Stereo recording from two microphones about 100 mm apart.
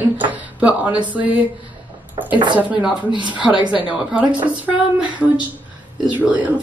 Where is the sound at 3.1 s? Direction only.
15° right (ahead or behind).